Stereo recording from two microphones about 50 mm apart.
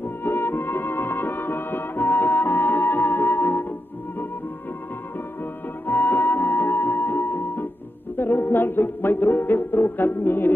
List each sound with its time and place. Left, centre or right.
0.2 s music: left
5.9 s music: left